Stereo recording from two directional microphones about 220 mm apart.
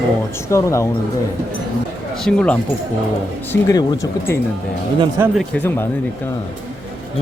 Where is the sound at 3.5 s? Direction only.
15° left (ahead or behind).